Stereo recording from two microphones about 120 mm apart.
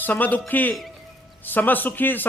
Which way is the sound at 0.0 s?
15° left (ahead or behind).